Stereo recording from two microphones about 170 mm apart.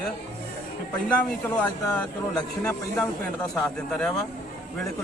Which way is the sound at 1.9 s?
5° left (ahead or behind).